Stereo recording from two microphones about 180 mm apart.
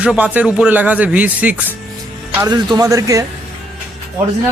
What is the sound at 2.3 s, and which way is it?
Speech, 20° right (ahead or behind).